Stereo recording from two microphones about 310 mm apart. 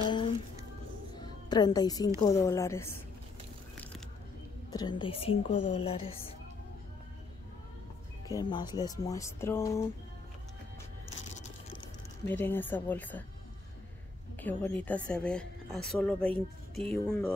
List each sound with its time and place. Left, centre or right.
0.0 s music: centre
2.2 s speech: centre
4.7 s speech: centre
8.3 s speech: centre
12.3 s a woman's voice: centre
14.4 s a woman's voice: centre